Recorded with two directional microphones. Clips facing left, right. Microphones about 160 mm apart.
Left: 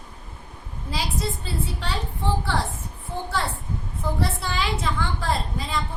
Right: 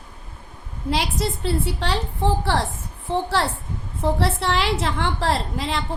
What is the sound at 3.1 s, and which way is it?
A woman's voice, 85° right.